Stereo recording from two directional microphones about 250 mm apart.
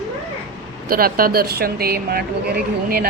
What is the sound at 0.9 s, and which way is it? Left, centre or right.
Speech, right.